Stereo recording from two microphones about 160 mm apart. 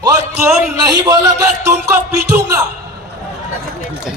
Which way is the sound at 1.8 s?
15° right (ahead or behind).